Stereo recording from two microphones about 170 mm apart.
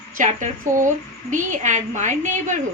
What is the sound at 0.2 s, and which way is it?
A woman's voice, 50° right (ahead or behind).